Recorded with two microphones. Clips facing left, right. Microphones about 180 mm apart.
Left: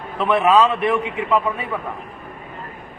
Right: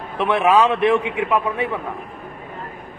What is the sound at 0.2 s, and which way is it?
Speech, 20° right (ahead or behind).